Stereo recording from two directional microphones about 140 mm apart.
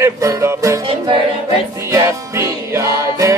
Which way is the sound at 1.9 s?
20° right (ahead or behind).